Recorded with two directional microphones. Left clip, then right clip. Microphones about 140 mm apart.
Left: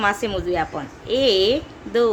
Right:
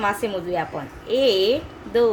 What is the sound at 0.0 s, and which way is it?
A woman's voice, 20° left (ahead or behind).